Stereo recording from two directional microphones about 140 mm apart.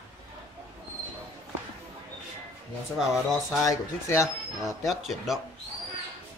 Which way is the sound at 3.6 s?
20° left (ahead or behind).